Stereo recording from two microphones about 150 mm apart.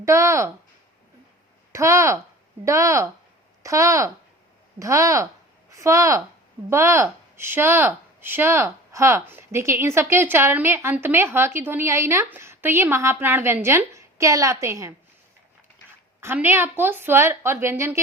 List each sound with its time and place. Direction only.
0.0 s speech: 20° right (ahead or behind)
1.7 s speech: 20° right (ahead or behind)
16.2 s speech: 15° right (ahead or behind)